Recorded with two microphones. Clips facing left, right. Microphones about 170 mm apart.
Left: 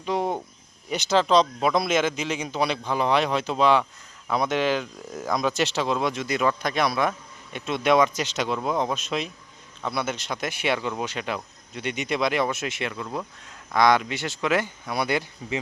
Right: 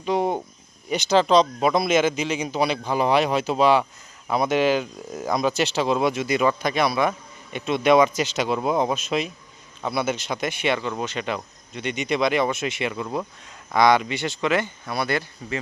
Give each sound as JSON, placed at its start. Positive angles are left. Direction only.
{"t": 0.0, "sound": "cricket", "side_deg": 0}
{"t": 0.9, "sound": "speech", "side_deg": 0}